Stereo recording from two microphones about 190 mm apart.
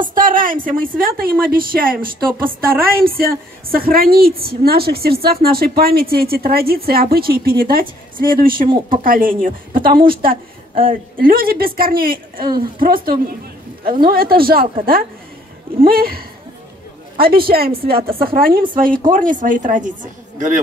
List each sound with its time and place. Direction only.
0.1 s a woman's voice: 45° right (ahead or behind)
15.8 s a woman's voice: 50° right (ahead or behind)